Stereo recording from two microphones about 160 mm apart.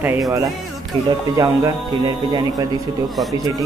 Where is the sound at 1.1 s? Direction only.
25° right (ahead or behind).